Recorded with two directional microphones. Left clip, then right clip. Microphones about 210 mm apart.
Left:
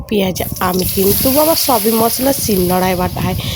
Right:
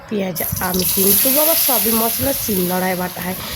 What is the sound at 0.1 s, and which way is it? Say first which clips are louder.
Speech: left 6 dB; 35° left (ahead or behind).